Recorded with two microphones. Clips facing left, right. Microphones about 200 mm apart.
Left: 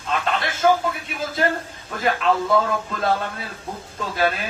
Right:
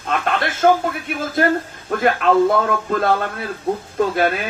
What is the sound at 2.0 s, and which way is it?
A man's voice, 55° right (ahead or behind).